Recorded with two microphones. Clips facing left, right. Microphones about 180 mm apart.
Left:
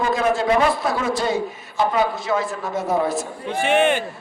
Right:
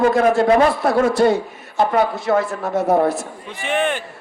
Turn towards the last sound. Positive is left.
turn(degrees=0)  # may be behind; listen again after turning